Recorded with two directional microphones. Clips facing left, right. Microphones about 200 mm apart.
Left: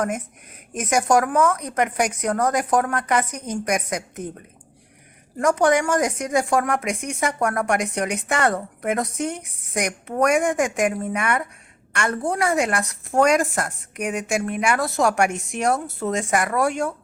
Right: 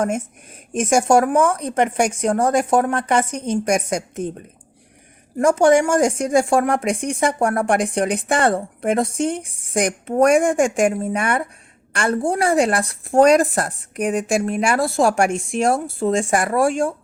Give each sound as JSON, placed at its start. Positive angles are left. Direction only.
{"t": 0.7, "sound": "a woman's voice", "side_deg": -30}
{"t": 5.4, "sound": "speech", "side_deg": -30}